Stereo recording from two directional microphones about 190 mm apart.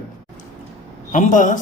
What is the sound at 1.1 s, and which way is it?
Speech, 40° left (ahead or behind).